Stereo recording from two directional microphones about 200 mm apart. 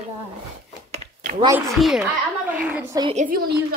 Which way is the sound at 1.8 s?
Centre (ahead or behind).